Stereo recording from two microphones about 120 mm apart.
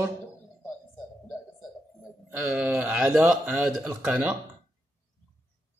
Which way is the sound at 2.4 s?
10° right (ahead or behind).